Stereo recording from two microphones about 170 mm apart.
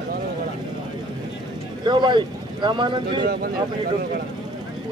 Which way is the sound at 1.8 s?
25° right (ahead or behind).